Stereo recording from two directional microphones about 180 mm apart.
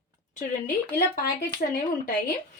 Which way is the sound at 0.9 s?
50° left (ahead or behind).